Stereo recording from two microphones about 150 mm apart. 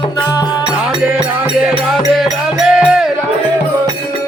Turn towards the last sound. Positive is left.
turn(degrees=-5)  # may be behind; listen again after turning